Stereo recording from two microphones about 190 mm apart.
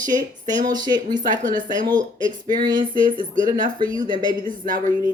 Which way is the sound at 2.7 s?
25° right (ahead or behind).